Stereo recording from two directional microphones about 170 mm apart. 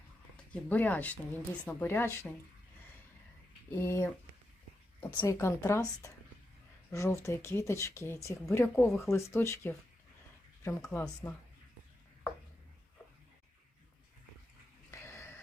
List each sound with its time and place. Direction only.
0.5 s speech: 10° left (ahead or behind)
3.8 s speech: 15° left (ahead or behind)
14.8 s dog: 15° left (ahead or behind)